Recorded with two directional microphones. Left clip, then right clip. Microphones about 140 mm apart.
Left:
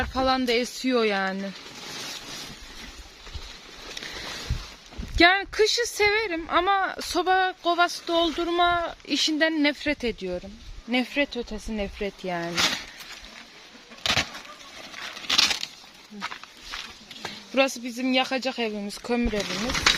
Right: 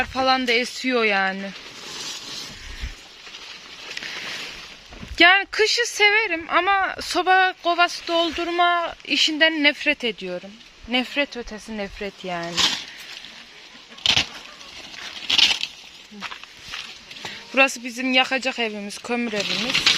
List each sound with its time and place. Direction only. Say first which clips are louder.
0.0 s speech: right 4 dB; centre (ahead or behind)
5.1 s speech: right 4 dB; 10° left (ahead or behind)
7.6 s speech: right 3 dB; 10° left (ahead or behind)
11.9 s speech: right 1 dB; 20° left (ahead or behind)
14.0 s a sound: right 5 dB; 25° left (ahead or behind)
15.3 s a sound: right 4 dB; 15° left (ahead or behind)
17.5 s speech: right 5 dB; centre (ahead or behind)
19.6 s speech: right 3 dB; 10° left (ahead or behind)